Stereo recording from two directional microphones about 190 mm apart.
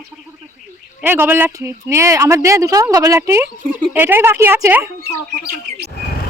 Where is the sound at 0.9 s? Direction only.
10° right (ahead or behind).